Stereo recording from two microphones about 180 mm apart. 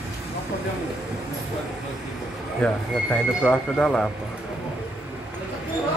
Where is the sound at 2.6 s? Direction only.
5° left (ahead or behind).